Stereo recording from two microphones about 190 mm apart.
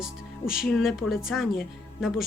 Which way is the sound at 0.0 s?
5° right (ahead or behind).